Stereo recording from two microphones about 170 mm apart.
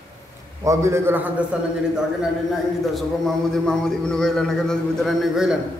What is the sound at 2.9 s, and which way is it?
A man's voice, 5° left (ahead or behind).